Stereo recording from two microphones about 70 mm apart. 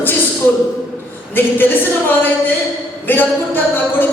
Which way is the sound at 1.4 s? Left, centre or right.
Left.